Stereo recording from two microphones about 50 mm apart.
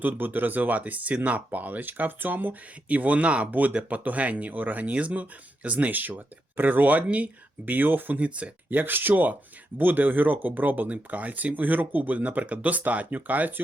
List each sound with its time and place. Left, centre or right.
0.0 s speech: right
8.8 s speech: right